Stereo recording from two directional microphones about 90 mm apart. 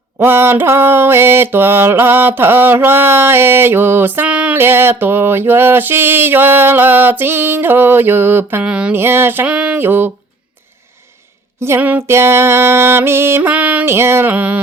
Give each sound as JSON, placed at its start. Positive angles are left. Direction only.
{"t": 0.2, "sound": "mantra", "side_deg": -25}
{"t": 4.5, "sound": "mantra", "side_deg": -25}
{"t": 8.6, "sound": "a sound", "side_deg": -10}
{"t": 9.0, "sound": "mantra", "side_deg": -25}
{"t": 9.5, "sound": "a sound", "side_deg": -10}
{"t": 9.8, "sound": "mantra", "side_deg": -25}
{"t": 11.8, "sound": "mantra", "side_deg": -20}
{"t": 12.0, "sound": "mantra", "side_deg": -30}
{"t": 13.5, "sound": "a sound", "side_deg": -15}
{"t": 13.8, "sound": "mantra", "side_deg": -25}